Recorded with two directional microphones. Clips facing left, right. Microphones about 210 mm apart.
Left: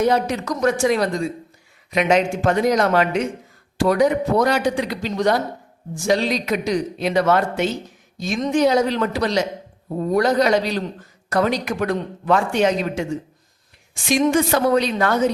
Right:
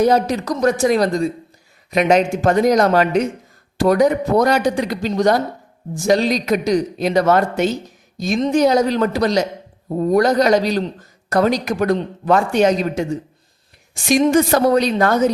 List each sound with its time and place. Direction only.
0.0 s a woman's voice: 35° right (ahead or behind)